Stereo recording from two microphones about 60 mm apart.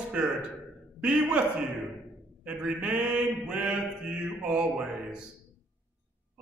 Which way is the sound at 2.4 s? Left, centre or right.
Right.